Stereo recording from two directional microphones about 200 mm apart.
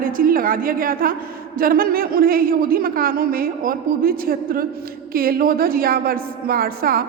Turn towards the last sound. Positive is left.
turn(degrees=-45)  # may be behind; listen again after turning